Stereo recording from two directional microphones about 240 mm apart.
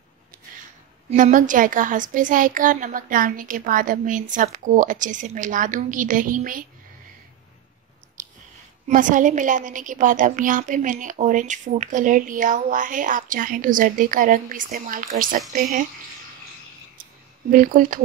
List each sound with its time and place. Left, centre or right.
1.1 s a woman's voice: right
8.2 s chewing: right
8.8 s a woman's voice: right
17.5 s a woman's voice: right